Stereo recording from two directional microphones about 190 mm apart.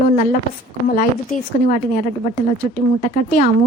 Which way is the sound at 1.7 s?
40° left (ahead or behind).